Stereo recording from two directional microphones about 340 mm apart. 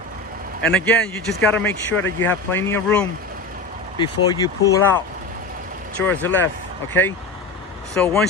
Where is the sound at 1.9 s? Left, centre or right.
Left.